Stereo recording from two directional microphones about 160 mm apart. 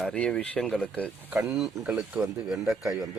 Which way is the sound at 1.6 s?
5° right (ahead or behind).